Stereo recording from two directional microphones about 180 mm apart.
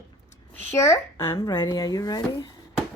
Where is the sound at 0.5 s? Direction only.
15° left (ahead or behind).